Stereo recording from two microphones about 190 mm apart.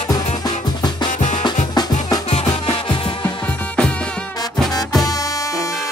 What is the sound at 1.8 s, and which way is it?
Music, 20° left (ahead or behind).